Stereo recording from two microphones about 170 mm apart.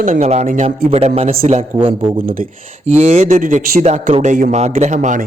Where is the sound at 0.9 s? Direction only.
35° right (ahead or behind).